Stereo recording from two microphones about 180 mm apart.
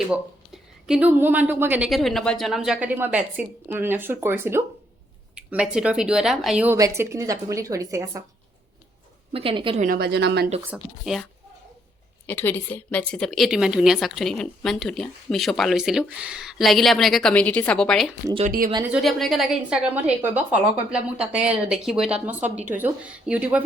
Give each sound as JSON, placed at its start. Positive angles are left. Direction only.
{"t": 0.1, "sound": "a woman's voice", "side_deg": -5}
{"t": 6.7, "sound": "a woman's voice", "side_deg": -15}
{"t": 9.3, "sound": "speech", "side_deg": -30}
{"t": 9.8, "sound": "speech", "side_deg": -55}
{"t": 10.6, "sound": "a woman's voice", "side_deg": -5}
{"t": 12.2, "sound": "a woman's voice", "side_deg": 10}
{"t": 18.4, "sound": "speech", "side_deg": -50}
{"t": 18.9, "sound": "a woman's voice", "side_deg": 0}